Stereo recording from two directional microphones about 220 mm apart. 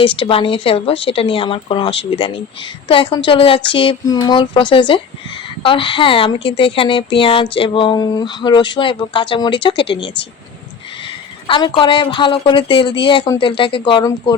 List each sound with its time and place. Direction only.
0.0 s speech: 25° left (ahead or behind)
11.4 s speech: 20° left (ahead or behind)